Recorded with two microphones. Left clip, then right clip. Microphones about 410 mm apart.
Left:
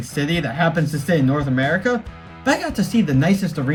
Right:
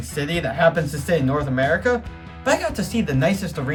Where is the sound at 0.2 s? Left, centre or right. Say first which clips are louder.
Left 2 dB; right.